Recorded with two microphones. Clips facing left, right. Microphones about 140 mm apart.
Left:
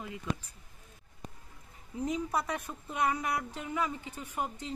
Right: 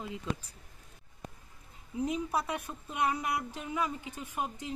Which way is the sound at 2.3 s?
15° right (ahead or behind).